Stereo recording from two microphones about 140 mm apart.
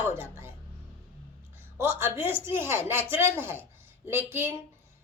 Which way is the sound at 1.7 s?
15° right (ahead or behind).